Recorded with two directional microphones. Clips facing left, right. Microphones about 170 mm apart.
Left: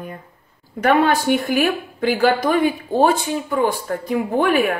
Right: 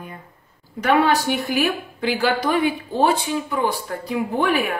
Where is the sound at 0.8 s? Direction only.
50° left (ahead or behind).